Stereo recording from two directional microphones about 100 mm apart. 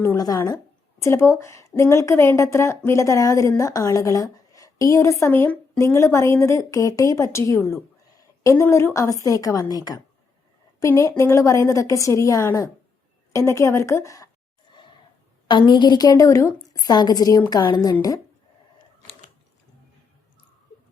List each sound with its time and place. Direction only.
1.0 s a woman's voice: 25° left (ahead or behind)
10.8 s a woman's voice: 30° left (ahead or behind)
15.4 s a woman's voice: 50° left (ahead or behind)